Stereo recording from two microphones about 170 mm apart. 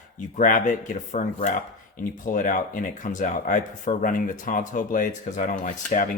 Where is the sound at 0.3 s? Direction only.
50° left (ahead or behind).